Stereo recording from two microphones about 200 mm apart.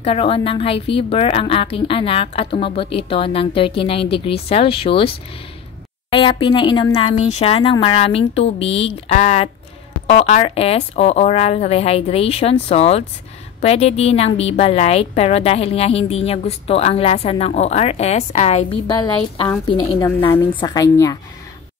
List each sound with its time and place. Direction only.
0.0 s a woman's voice: 30° left (ahead or behind)
20.3 s a woman's voice: 15° left (ahead or behind)